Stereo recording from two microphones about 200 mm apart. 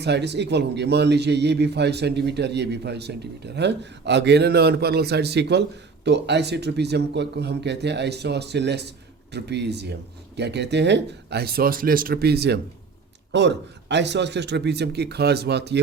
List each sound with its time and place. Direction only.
0.0 s a man's voice: 60° right (ahead or behind)